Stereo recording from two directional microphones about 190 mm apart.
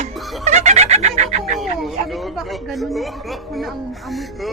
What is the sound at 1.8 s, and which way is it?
Speech, centre (ahead or behind).